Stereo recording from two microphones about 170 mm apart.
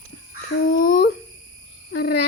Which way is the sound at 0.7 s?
55° left (ahead or behind).